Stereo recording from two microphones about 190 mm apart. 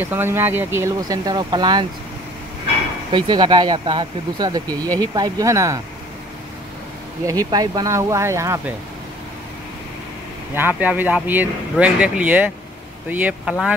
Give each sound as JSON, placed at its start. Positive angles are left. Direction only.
{"t": 0.0, "sound": "speech", "side_deg": -10}
{"t": 3.1, "sound": "speech", "side_deg": -25}
{"t": 7.2, "sound": "speech", "side_deg": -20}
{"t": 10.5, "sound": "speech", "side_deg": -10}